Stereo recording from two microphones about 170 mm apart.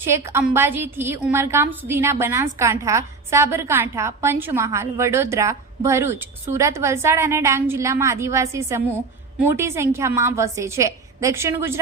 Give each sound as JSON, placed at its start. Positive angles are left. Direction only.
{"t": 0.0, "sound": "a woman's voice", "side_deg": -15}